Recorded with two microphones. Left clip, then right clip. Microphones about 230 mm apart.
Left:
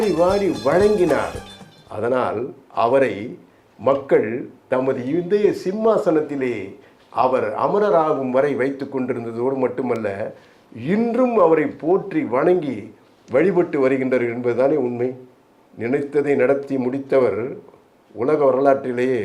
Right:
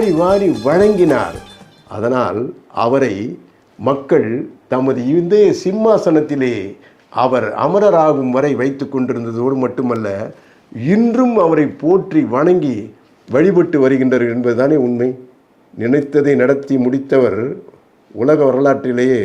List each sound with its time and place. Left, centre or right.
0.0 s speech: centre
1.2 s music: centre
1.9 s a man's voice: right